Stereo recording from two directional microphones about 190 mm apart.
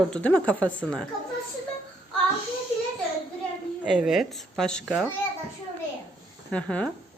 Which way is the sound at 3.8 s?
5° right (ahead or behind).